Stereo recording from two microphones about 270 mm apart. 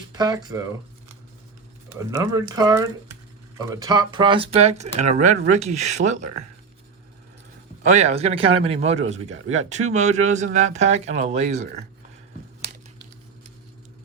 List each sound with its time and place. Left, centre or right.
0.1 s speech: centre
1.9 s speech: centre
7.9 s speech: right
9.6 s speech: right
9.9 s speech: right